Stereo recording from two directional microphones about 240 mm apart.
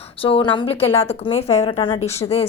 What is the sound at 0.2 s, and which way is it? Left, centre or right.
A woman's voice, left.